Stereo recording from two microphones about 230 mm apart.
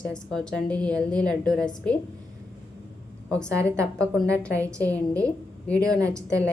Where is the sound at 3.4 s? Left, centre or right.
Centre.